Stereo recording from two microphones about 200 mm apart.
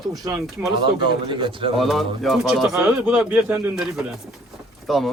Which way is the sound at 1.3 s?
25° right (ahead or behind).